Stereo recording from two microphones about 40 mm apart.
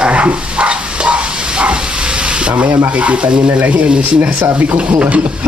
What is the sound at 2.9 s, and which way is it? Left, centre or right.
Speech, right.